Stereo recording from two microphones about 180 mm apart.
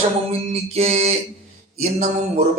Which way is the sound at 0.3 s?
35° right (ahead or behind).